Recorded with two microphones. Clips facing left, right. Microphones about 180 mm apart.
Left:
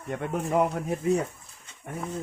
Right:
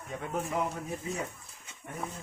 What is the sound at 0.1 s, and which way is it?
Speech, 65° left (ahead or behind).